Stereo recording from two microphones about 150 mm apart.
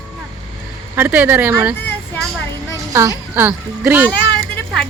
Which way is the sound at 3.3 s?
15° right (ahead or behind).